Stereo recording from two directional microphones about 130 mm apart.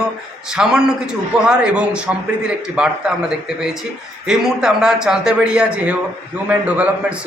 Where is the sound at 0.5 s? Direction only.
5° right (ahead or behind).